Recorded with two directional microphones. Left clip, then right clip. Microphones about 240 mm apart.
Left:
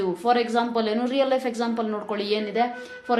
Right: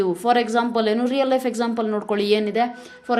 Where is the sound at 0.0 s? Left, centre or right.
Right.